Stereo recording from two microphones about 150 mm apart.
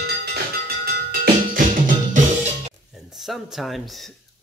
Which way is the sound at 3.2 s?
Centre (ahead or behind).